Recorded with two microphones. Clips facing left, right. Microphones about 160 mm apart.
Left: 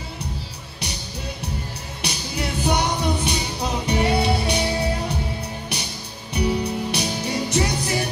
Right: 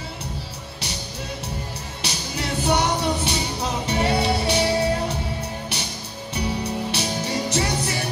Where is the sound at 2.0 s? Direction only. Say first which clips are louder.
Left 2 dB; 15° left (ahead or behind).